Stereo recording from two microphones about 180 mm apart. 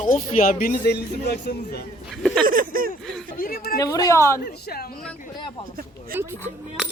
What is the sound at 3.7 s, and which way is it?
Speech, 20° left (ahead or behind).